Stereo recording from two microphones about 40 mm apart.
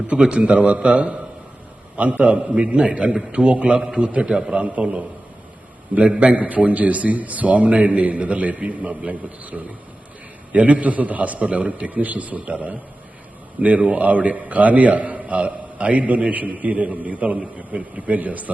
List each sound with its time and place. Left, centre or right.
0.2 s a man's voice: right
4.5 s a man's voice: right
6.1 s a man's voice: right